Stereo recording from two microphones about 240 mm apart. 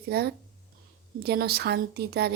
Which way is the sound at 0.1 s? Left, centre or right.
Right.